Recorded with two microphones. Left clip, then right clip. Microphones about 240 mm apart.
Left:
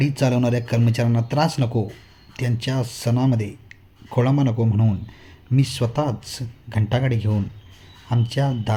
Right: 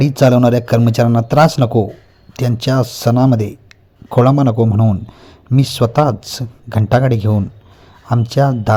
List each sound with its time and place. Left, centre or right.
0.0 s speech: right